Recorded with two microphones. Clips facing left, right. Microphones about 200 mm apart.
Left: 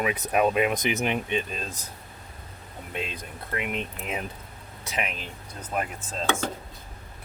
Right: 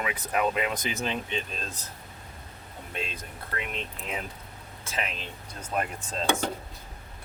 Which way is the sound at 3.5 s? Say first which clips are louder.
Left 5 dB; 15° left (ahead or behind).